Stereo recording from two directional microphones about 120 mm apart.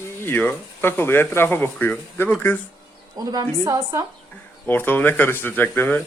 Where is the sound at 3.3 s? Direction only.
30° right (ahead or behind).